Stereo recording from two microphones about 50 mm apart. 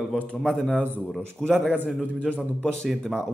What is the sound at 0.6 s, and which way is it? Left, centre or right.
Speech, centre.